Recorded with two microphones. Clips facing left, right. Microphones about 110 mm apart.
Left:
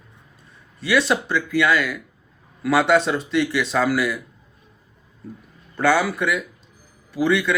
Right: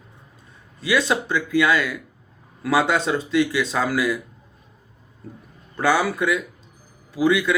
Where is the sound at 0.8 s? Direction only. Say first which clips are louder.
Left 1 dB; 15° right (ahead or behind).